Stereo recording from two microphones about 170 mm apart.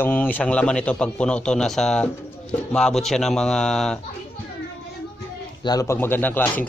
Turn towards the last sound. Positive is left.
turn(degrees=10)  # may be behind; listen again after turning